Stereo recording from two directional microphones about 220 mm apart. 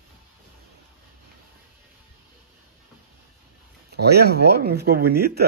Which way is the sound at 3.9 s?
45° right (ahead or behind).